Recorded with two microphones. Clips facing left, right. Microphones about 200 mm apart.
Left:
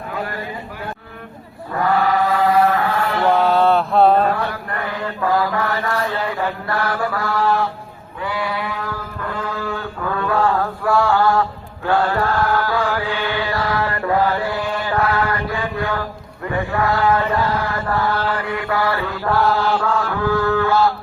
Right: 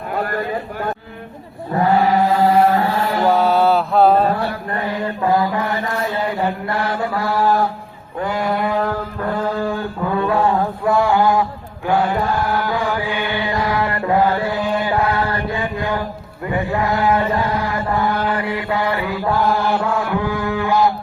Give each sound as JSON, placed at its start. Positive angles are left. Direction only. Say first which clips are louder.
{"t": 0.1, "sound": "a sound", "louder": "right 6 dB", "side_deg": -50}
{"t": 1.7, "sound": "chant", "louder": "right 3 dB", "side_deg": -25}
{"t": 3.2, "sound": "mantra", "louder": "even", "side_deg": -5}
{"t": 4.4, "sound": "mantra", "louder": "right 2 dB", "side_deg": -30}
{"t": 7.4, "sound": "a sound", "louder": "right 2 dB", "side_deg": -40}
{"t": 10.0, "sound": "mantra", "louder": "right 1 dB", "side_deg": -20}
{"t": 11.9, "sound": "chant", "louder": "even", "side_deg": -15}